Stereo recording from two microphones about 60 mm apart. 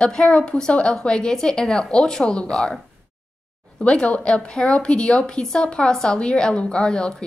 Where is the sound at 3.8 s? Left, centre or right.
Centre.